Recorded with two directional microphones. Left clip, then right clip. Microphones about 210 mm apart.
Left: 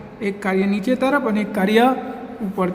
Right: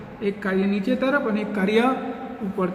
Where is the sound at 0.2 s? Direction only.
50° left (ahead or behind).